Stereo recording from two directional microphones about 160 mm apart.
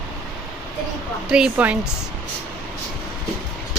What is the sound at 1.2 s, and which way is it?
Speech, 5° right (ahead or behind).